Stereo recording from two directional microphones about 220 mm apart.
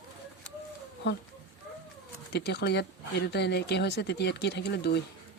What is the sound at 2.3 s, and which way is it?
Speech, 50° left (ahead or behind).